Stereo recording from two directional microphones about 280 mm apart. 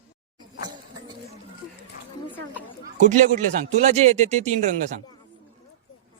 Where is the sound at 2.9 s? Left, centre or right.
Right.